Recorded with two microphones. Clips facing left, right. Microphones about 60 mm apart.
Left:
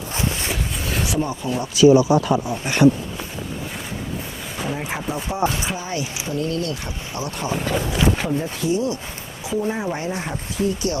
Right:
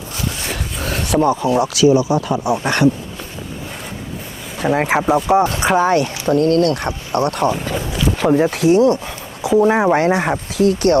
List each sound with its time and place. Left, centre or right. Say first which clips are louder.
0.1 s a sound: even; left
0.5 s a sound: right 2 dB; right
1.1 s speech: right 13 dB; right
1.9 s speech: even; left
2.4 s speech: right 6 dB; right
4.6 s speech: right 11 dB; right
10.5 s speech: right 8 dB; right